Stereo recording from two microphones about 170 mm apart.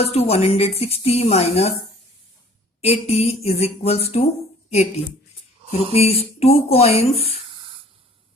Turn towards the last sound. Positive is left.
turn(degrees=35)  # may be behind; listen again after turning